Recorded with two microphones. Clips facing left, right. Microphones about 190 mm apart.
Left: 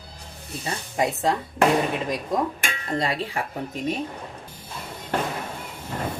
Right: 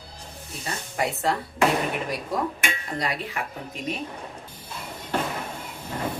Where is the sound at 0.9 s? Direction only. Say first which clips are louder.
Left 2 dB; 15° left (ahead or behind).